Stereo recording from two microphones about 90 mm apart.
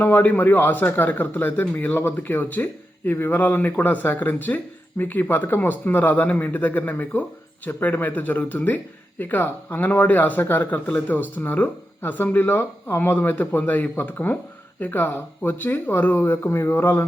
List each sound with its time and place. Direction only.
0.0 s a man's voice: 20° left (ahead or behind)